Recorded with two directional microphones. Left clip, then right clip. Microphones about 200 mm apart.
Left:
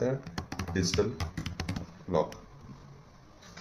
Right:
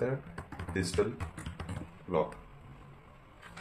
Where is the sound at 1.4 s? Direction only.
45° left (ahead or behind).